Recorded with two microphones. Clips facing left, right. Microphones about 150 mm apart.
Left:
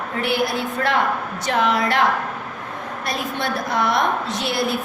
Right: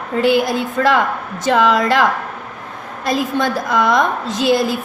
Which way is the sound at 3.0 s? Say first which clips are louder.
Right 8 dB; 90° right.